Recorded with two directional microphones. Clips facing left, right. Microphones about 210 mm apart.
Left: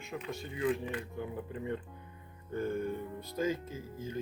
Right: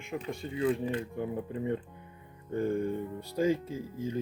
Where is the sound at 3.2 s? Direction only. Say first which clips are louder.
Right 6 dB; 30° right (ahead or behind).